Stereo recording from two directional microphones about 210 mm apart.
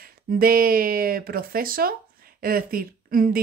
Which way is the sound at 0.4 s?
45° right (ahead or behind).